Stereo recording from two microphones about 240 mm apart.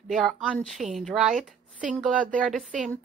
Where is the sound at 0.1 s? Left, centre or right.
Centre.